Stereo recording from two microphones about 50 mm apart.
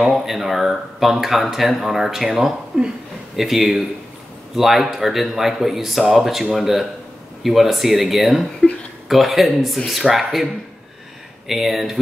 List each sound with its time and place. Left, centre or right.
0.0 s speech: centre